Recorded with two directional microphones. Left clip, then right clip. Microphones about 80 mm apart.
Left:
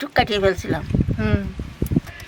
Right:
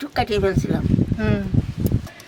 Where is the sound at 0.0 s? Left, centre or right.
Left.